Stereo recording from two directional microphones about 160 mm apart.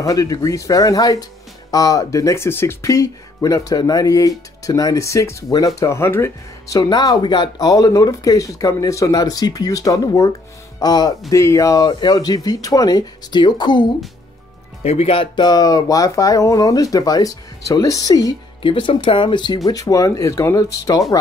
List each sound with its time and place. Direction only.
0.0 s speech: 20° left (ahead or behind)
6.8 s speech: 25° left (ahead or behind)
14.8 s speech: 40° left (ahead or behind); by 21.0 s 20° left (ahead or behind)